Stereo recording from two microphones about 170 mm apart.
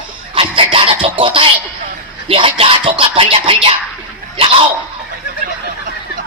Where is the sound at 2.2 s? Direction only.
30° right (ahead or behind).